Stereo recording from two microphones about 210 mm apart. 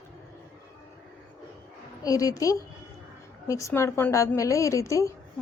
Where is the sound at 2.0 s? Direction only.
15° left (ahead or behind).